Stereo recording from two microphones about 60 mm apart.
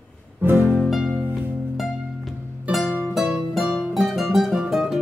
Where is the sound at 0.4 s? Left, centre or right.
Right.